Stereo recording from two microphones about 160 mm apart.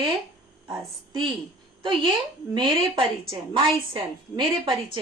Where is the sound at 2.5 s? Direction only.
30° right (ahead or behind).